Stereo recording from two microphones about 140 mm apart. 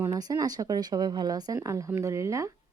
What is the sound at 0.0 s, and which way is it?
A woman's voice, 25° right (ahead or behind).